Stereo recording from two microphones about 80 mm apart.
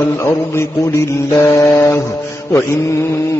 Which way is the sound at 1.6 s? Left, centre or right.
Left.